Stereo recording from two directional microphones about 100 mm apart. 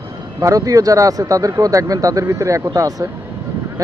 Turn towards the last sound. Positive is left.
turn(degrees=-35)  # may be behind; listen again after turning